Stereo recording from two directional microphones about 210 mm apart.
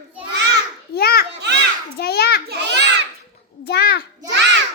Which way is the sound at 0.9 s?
50° left (ahead or behind).